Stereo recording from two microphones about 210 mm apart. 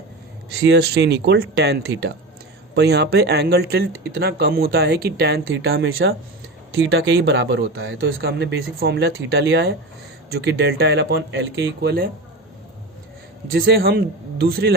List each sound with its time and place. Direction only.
0.5 s speech: 50° right (ahead or behind)
5.9 s speech: 70° right (ahead or behind); by 12.1 s 45° right (ahead or behind)
13.5 s speech: 45° right (ahead or behind)